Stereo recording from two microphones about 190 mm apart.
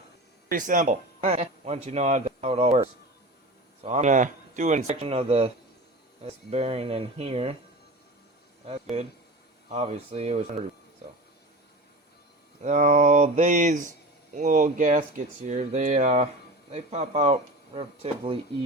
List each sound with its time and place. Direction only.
0.5 s speech: 45° right (ahead or behind)
3.8 s speech: 40° right (ahead or behind)
8.6 s speech: 30° right (ahead or behind)
12.6 s speech: 40° right (ahead or behind)